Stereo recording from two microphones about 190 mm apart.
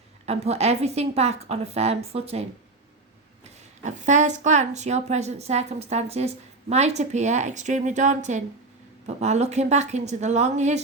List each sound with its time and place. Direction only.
0.3 s a woman's voice: 35° right (ahead or behind)
3.8 s a woman's voice: 40° right (ahead or behind)